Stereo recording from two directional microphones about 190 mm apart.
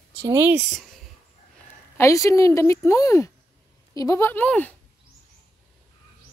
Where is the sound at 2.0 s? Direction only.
15° left (ahead or behind).